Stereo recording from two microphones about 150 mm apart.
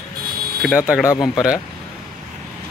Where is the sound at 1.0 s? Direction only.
25° left (ahead or behind).